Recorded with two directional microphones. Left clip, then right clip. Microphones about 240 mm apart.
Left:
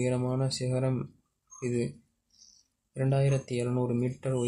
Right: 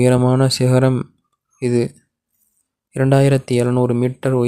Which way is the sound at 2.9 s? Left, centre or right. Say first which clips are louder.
Right 15 dB; right.